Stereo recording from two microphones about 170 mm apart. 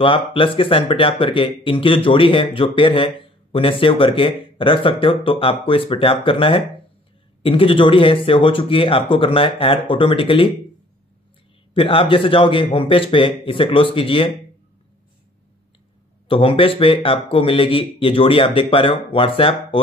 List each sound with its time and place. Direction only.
0.0 s speech: 30° left (ahead or behind)
11.7 s speech: 30° left (ahead or behind)
16.3 s speech: 30° left (ahead or behind)